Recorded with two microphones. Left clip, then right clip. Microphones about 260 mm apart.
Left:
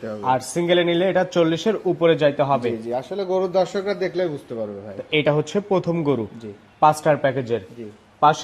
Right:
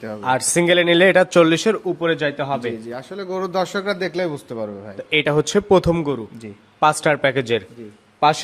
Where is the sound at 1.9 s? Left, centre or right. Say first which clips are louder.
Left 3 dB; centre; by 4.6 s right.